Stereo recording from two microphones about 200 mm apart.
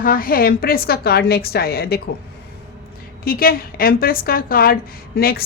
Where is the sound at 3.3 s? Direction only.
50° left (ahead or behind).